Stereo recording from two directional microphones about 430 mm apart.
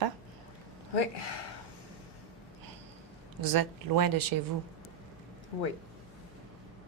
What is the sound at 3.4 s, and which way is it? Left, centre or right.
Speech, right.